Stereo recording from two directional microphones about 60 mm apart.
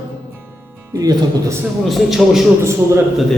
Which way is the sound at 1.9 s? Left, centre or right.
Centre.